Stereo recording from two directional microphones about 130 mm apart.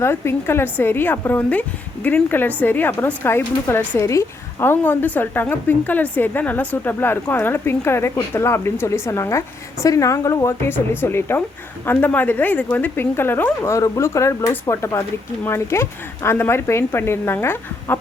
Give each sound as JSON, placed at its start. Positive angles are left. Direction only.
{"t": 0.0, "sound": "a woman's voice", "side_deg": 20}